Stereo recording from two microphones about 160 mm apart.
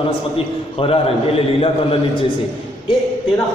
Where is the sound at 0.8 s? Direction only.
35° left (ahead or behind).